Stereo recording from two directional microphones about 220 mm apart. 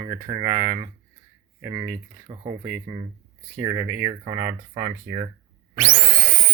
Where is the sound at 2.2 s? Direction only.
25° right (ahead or behind).